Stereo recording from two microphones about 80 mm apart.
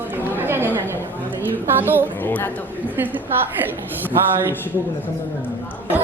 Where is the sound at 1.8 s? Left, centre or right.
Right.